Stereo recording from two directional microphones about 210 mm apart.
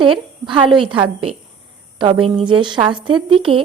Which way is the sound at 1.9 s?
25° right (ahead or behind).